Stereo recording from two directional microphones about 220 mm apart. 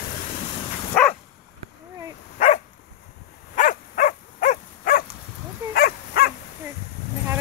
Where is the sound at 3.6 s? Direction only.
35° left (ahead or behind).